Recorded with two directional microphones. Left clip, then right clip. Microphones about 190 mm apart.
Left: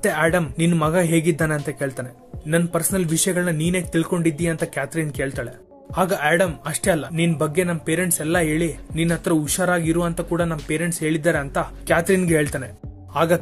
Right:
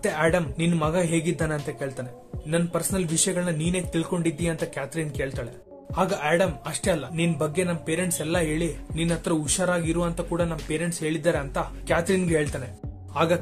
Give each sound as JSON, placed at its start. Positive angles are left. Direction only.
{"t": 0.0, "sound": "speech", "side_deg": 25}